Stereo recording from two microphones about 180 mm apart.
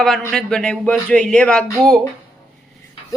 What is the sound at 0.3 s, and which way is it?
Speech, 5° left (ahead or behind).